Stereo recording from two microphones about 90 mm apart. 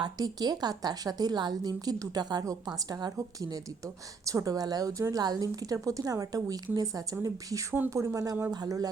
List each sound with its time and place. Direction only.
0.0 s a woman's voice: 50° right (ahead or behind)